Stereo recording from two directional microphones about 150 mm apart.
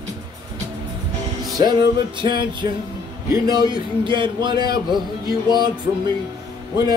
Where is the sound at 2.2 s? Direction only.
30° right (ahead or behind).